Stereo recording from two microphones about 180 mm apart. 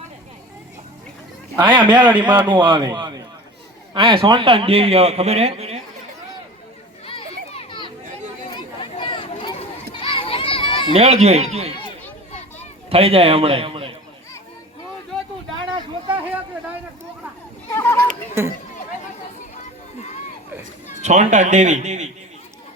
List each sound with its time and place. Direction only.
1.5 s a man's voice: 25° right (ahead or behind)
7.0 s children playing: 30° left (ahead or behind)
8.5 s chatter: 25° left (ahead or behind)
9.9 s children playing: 30° left (ahead or behind)
10.9 s a man's voice: 35° right (ahead or behind)
12.9 s a man's voice: 30° right (ahead or behind)
15.7 s a sound: 25° right (ahead or behind)
18.4 s speech: 15° right (ahead or behind)
21.0 s a man's voice: 40° right (ahead or behind)